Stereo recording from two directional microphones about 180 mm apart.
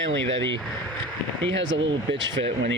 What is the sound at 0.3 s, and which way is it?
Speech, 30° right (ahead or behind).